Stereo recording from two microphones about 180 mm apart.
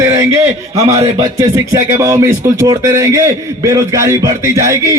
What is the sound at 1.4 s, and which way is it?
Speech, 20° right (ahead or behind).